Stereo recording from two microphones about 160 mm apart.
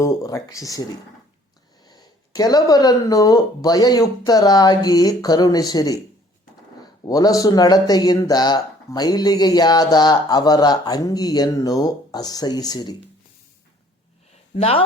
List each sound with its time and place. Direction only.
0.0 s speech: 20° left (ahead or behind)
7.0 s speech: 20° left (ahead or behind)
14.5 s speech: 35° left (ahead or behind)